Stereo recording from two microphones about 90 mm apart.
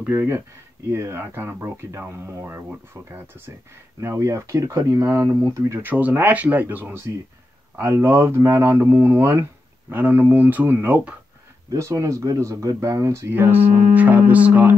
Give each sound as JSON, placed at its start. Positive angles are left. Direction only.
{"t": 0.0, "sound": "speech", "side_deg": -25}
{"t": 11.7, "sound": "speech", "side_deg": -35}